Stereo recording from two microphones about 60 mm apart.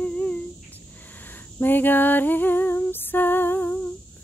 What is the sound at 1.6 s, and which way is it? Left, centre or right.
Female singing, left.